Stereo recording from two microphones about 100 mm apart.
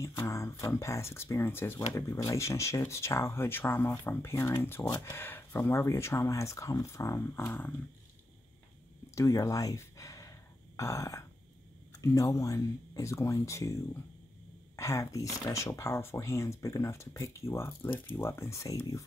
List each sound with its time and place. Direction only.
0.0 s speech: 30° left (ahead or behind)
9.1 s speech: 35° left (ahead or behind)
14.8 s speech: 30° left (ahead or behind)